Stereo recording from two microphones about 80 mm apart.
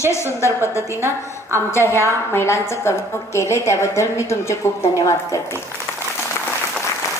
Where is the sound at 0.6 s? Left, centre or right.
Left.